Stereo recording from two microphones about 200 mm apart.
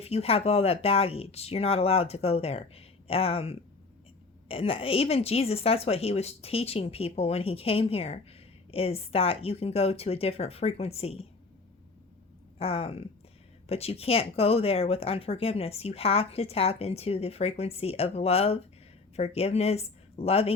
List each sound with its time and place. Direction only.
0.0 s a woman's voice: 30° left (ahead or behind)
12.5 s a woman's voice: 30° left (ahead or behind)